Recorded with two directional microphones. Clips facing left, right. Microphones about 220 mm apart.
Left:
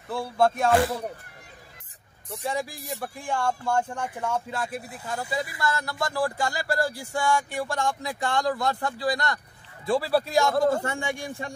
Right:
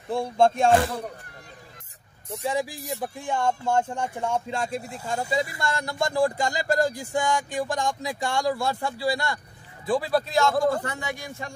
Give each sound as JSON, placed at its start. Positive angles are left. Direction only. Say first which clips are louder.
{"t": 0.1, "sound": "speech", "louder": "right 2 dB", "side_deg": -25}
{"t": 2.2, "sound": "speech", "louder": "right 3 dB", "side_deg": -15}
{"t": 9.8, "sound": "a man's voice", "louder": "even", "side_deg": 5}
{"t": 10.7, "sound": "speech", "louder": "left 1 dB", "side_deg": 25}